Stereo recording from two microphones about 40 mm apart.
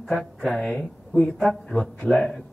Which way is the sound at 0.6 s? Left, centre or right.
Left.